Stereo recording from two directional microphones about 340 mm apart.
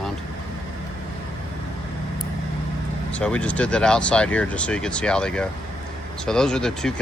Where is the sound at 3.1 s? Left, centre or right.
Centre.